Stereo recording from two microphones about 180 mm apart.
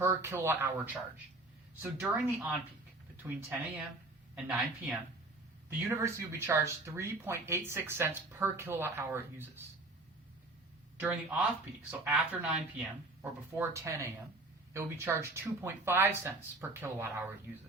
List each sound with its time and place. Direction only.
0.0 s speech: 15° right (ahead or behind)
1.8 s speech: 10° right (ahead or behind)
11.0 s speech: 10° right (ahead or behind)